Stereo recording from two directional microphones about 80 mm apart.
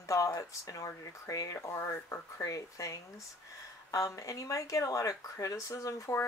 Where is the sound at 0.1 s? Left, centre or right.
Left.